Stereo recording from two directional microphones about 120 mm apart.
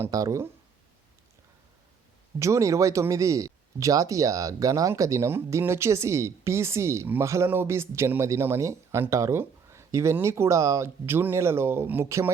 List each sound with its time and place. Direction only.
0.0 s speech: 30° right (ahead or behind)
2.4 s speech: 25° right (ahead or behind)